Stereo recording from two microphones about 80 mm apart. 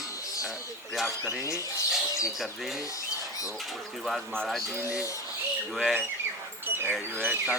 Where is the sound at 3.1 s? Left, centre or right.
Left.